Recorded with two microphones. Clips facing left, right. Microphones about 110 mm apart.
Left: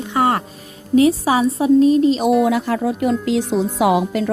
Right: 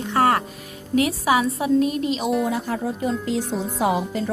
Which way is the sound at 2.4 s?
90° left.